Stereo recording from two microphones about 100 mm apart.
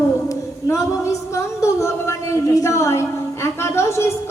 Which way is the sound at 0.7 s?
30° left (ahead or behind).